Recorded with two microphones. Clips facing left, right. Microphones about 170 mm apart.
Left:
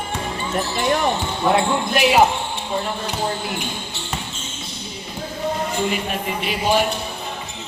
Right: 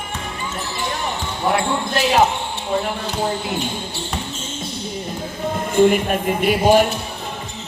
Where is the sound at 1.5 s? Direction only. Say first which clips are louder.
Left 1 dB; 20° left (ahead or behind).